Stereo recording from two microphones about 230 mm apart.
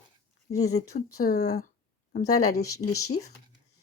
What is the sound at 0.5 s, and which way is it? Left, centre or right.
Speech, left.